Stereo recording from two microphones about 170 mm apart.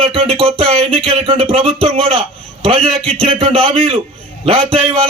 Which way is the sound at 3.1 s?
35° right (ahead or behind).